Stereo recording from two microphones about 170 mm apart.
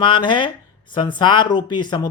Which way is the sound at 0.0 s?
30° left (ahead or behind).